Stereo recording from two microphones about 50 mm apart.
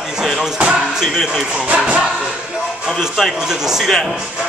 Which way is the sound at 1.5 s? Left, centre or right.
Right.